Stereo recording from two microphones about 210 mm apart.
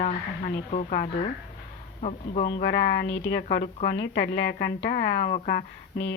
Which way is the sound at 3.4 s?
40° left (ahead or behind).